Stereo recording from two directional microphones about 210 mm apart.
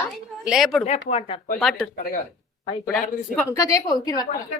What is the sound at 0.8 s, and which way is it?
Speech, 30° left (ahead or behind).